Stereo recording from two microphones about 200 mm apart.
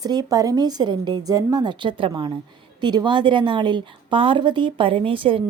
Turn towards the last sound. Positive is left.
turn(degrees=-25)  # may be behind; listen again after turning